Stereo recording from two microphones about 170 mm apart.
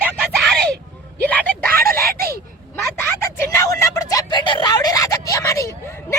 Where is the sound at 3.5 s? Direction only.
15° left (ahead or behind).